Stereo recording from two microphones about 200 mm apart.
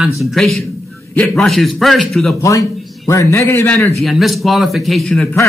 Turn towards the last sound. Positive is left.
turn(degrees=0)  # may be behind; listen again after turning